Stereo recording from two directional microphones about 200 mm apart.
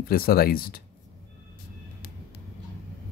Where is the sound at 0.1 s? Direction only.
50° left (ahead or behind).